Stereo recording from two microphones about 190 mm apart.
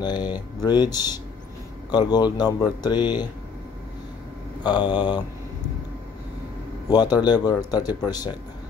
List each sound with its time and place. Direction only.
0.0 s speech: 20° left (ahead or behind)
4.6 s speech: 25° left (ahead or behind)
6.9 s speech: 20° left (ahead or behind)